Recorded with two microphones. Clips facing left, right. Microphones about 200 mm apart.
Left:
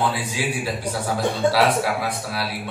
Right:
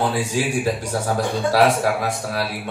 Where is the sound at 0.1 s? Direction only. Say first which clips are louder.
Right 4 dB; 45° right (ahead or behind).